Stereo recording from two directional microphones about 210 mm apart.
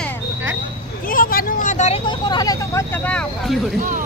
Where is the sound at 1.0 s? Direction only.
40° left (ahead or behind); by 3.5 s 5° left (ahead or behind).